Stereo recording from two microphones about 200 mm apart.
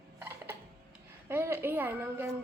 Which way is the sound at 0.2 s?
10° right (ahead or behind).